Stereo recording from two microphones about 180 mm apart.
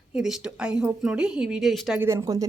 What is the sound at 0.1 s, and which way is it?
Speech, 5° right (ahead or behind).